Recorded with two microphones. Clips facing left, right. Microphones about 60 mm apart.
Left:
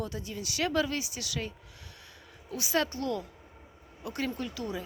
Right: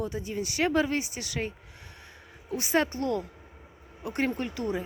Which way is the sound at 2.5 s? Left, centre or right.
Right.